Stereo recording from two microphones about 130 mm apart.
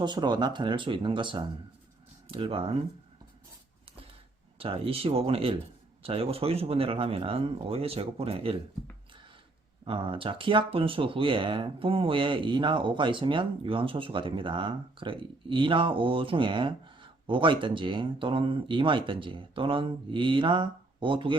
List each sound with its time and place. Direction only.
0.0 s speech: 35° right (ahead or behind)
4.5 s speech: 45° right (ahead or behind)
9.8 s speech: 40° right (ahead or behind)